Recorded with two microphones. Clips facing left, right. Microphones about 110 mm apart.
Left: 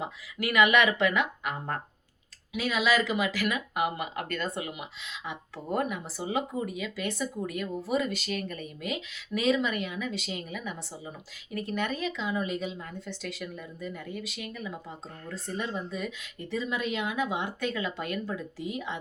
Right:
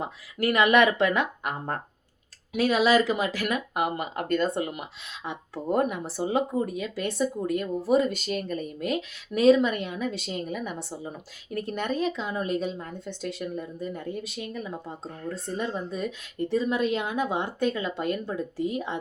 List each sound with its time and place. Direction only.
0.0 s speech: 40° right (ahead or behind)
2.5 s speech: 45° right (ahead or behind)
4.5 s speech: 45° right (ahead or behind); by 8.6 s 30° right (ahead or behind)
8.8 s speech: 45° right (ahead or behind)